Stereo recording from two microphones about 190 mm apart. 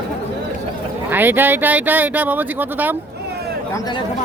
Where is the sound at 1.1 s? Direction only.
10° right (ahead or behind).